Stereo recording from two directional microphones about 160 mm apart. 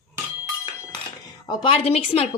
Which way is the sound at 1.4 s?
30° left (ahead or behind).